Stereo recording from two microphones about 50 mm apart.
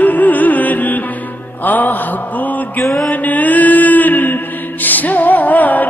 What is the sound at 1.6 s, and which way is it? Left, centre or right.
Mantra, left.